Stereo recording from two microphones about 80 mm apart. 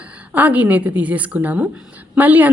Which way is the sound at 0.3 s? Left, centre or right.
Centre.